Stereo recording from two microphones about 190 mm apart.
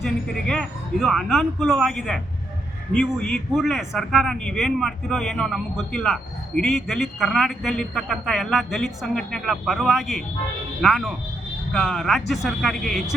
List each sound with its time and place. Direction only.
0.0 s speech: centre (ahead or behind)